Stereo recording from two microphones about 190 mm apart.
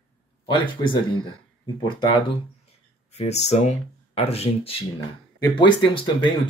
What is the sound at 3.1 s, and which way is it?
Speech, 35° left (ahead or behind).